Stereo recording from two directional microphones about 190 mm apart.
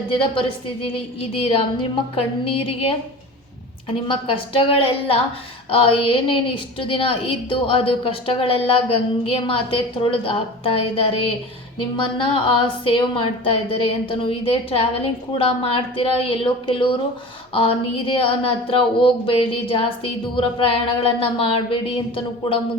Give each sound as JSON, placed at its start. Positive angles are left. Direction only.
{"t": 0.1, "sound": "a woman's voice", "side_deg": 25}
{"t": 4.1, "sound": "a woman's voice", "side_deg": 30}